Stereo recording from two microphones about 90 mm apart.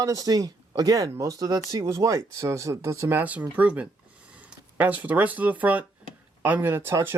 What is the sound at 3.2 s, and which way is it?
Speech, 15° right (ahead or behind).